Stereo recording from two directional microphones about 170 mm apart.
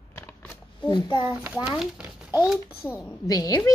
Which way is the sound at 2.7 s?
15° left (ahead or behind).